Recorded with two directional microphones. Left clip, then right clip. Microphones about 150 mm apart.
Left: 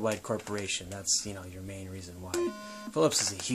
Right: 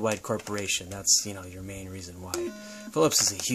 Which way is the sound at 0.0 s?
35° right (ahead or behind).